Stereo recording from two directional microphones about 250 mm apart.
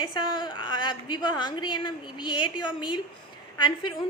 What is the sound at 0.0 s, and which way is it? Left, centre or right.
A woman's voice, centre.